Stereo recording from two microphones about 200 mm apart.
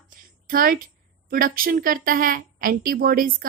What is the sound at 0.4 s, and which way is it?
A woman's voice, 45° right (ahead or behind).